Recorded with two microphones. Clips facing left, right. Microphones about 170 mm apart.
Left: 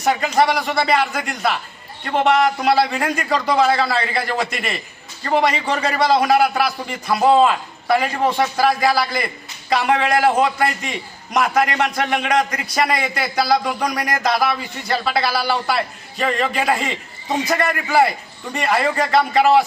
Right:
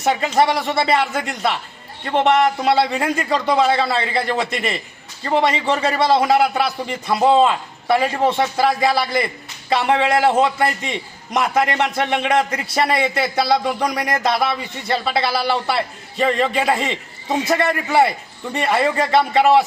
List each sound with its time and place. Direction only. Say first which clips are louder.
0.0 s a man's voice: even; 25° right (ahead or behind)